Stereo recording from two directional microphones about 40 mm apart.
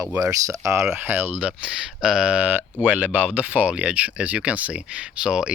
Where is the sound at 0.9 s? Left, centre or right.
Right.